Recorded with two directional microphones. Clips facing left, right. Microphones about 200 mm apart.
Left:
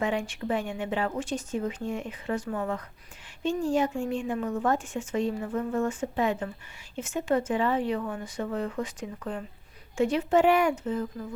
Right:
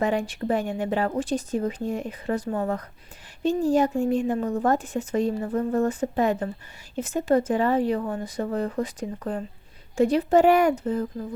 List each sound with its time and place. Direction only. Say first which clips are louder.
0.0 s speech: right 4 dB; 40° right (ahead or behind)